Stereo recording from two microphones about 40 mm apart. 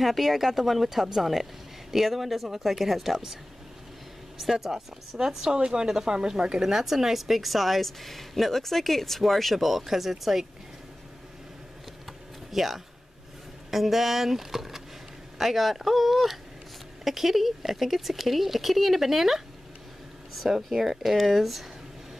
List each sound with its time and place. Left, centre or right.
0.0 s a woman's voice: centre
4.4 s a woman's voice: centre
12.1 s computer keyboard: centre
13.7 s a woman's voice: centre